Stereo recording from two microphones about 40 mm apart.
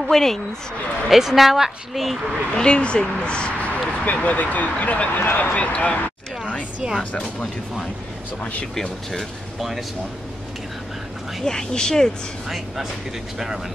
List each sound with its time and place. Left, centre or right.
0.0 s speech: centre
1.1 s a woman's voice: centre
2.5 s speech: left
3.6 s speech: left
5.1 s speech: left
7.1 s speech: left
9.6 s speech: centre
11.4 s speech: centre
12.4 s speech: centre